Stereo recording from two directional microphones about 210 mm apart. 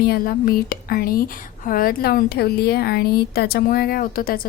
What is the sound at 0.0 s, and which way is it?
A woman's voice, 45° left (ahead or behind).